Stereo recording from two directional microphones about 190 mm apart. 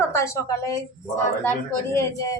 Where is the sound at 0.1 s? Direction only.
15° left (ahead or behind).